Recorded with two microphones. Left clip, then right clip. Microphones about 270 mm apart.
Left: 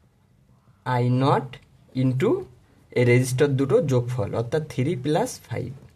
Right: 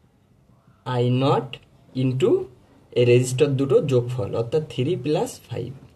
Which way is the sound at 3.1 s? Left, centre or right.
Left.